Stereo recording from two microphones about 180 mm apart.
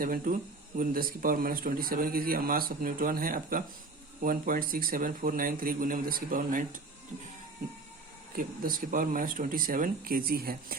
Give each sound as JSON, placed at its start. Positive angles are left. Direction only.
{"t": 0.0, "sound": "speech", "side_deg": -50}
{"t": 8.4, "sound": "speech", "side_deg": -50}